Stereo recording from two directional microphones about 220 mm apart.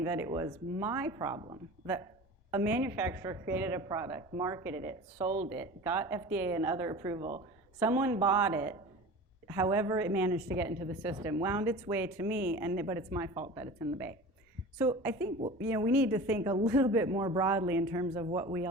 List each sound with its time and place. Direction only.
0.0 s speech: 10° right (ahead or behind)
7.8 s speech: 10° right (ahead or behind)
14.8 s speech: 15° right (ahead or behind)